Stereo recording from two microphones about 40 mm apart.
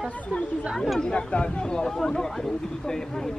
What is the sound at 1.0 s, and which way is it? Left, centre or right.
Speech, left.